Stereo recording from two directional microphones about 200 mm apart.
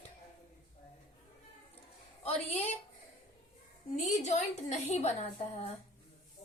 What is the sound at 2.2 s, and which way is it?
Speech, 30° left (ahead or behind).